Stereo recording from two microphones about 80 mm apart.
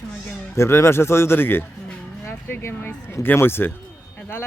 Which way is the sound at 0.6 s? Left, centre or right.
Left.